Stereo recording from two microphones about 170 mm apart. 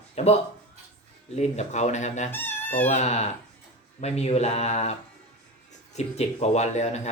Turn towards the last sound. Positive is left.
turn(degrees=40)  # may be behind; listen again after turning